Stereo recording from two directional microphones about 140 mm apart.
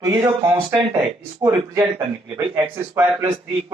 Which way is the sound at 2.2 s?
25° right (ahead or behind).